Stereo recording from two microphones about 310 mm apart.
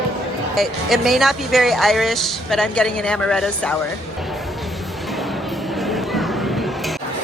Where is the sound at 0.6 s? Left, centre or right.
Centre.